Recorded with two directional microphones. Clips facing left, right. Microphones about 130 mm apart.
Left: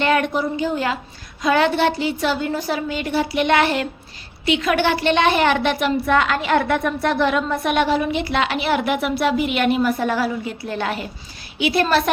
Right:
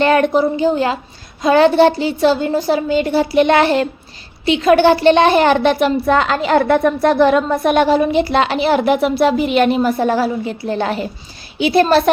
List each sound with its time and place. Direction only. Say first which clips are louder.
0.0 s a woman's voice: right 6 dB; 35° right (ahead or behind)